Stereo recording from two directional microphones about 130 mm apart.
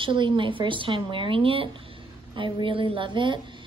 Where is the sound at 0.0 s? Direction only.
40° right (ahead or behind).